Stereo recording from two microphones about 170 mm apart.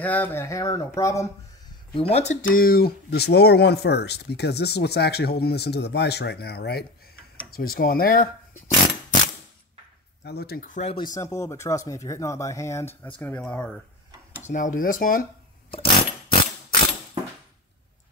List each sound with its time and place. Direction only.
0.0 s speech: 10° left (ahead or behind)
2.0 s speech: 35° left (ahead or behind)
2.4 s speech: 55° left (ahead or behind)
10.2 s speech: 70° left (ahead or behind); by 11.0 s 45° left (ahead or behind)
11.1 s speech: 15° left (ahead or behind)
14.4 s speech: 50° left (ahead or behind)
15.7 s chainsaw: 30° left (ahead or behind)